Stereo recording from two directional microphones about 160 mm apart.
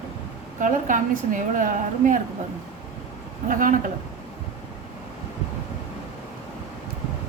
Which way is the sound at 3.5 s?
55° right (ahead or behind).